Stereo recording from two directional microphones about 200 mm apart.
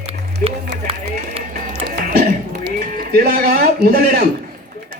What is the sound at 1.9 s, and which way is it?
Music, 50° right (ahead or behind).